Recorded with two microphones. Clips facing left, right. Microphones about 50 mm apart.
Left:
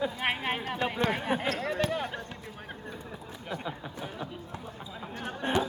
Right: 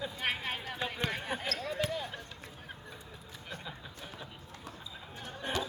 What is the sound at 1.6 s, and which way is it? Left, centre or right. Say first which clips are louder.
Basketball bounce: left 5 dB; left.